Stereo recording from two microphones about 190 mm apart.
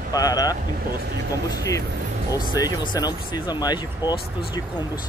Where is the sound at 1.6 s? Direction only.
15° left (ahead or behind).